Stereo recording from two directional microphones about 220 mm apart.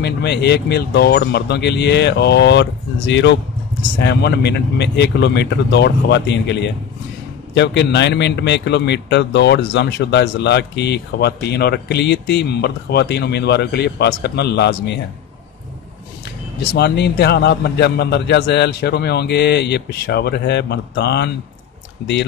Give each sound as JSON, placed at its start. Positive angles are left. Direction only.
{"t": 0.0, "sound": "a man's voice", "side_deg": 50}
{"t": 16.7, "sound": "a man's voice", "side_deg": 50}